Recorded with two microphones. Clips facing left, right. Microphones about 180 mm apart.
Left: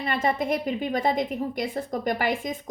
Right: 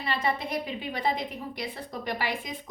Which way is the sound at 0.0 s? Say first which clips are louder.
Left 4 dB; 45° left (ahead or behind).